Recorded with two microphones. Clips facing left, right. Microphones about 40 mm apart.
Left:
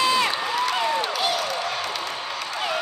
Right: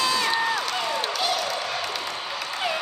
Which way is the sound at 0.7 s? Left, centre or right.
Centre.